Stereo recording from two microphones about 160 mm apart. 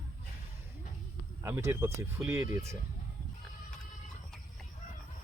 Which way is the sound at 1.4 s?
15° right (ahead or behind).